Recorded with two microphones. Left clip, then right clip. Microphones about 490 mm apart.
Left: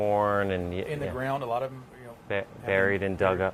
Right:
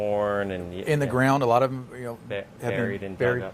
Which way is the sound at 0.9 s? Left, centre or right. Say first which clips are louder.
Right 11 dB; right.